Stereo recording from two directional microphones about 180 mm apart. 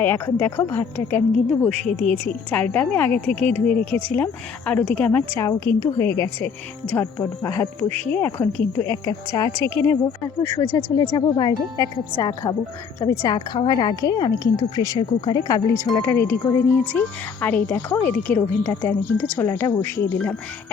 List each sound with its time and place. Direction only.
0.0 s speech: 10° left (ahead or behind)
9.5 s a woman's voice: 25° right (ahead or behind)
9.7 s speech: 15° left (ahead or behind)